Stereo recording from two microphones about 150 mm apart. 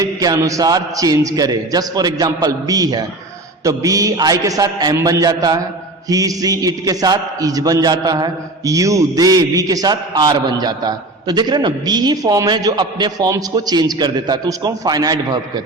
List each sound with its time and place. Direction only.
0.0 s a man's voice: 25° right (ahead or behind)